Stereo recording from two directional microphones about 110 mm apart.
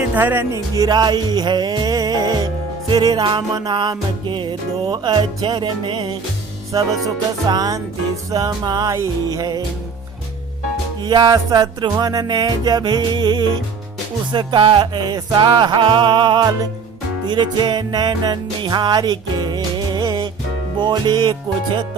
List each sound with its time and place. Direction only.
0.1 s speech: 15° right (ahead or behind)
0.8 s music: 40° right (ahead or behind)
11.0 s music: 40° right (ahead or behind)